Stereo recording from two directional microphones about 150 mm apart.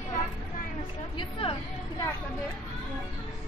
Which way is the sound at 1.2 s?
35° left (ahead or behind).